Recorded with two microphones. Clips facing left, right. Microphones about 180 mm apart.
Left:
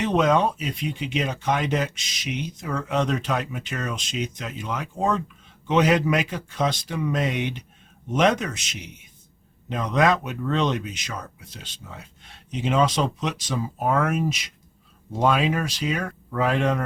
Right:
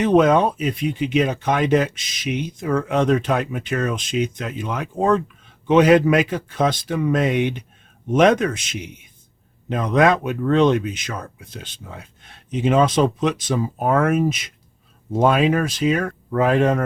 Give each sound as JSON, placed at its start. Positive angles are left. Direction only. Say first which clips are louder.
{"t": 0.0, "sound": "speech", "louder": "right 5 dB", "side_deg": -50}